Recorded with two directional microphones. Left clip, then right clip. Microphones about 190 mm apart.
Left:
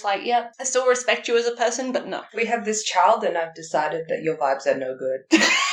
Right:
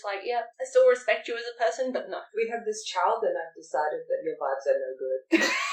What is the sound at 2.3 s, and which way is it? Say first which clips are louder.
Speech: left 6 dB; 5° right (ahead or behind).